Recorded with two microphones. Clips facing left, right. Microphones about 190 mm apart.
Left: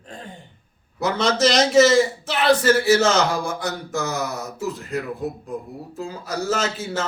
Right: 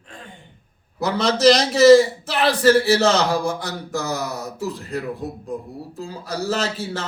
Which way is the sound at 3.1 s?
35° right (ahead or behind).